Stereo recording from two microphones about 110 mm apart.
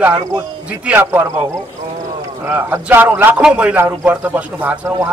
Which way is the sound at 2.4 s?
15° right (ahead or behind).